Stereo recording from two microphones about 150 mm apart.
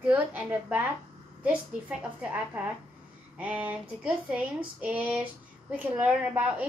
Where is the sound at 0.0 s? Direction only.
10° right (ahead or behind).